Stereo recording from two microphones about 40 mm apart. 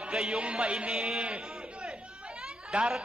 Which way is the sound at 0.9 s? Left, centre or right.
Centre.